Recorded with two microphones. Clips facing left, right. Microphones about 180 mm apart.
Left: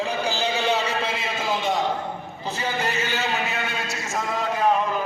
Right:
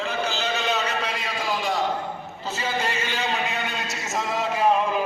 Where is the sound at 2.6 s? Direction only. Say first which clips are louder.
Left 1 dB; 10° left (ahead or behind); by 5.0 s 5° right (ahead or behind).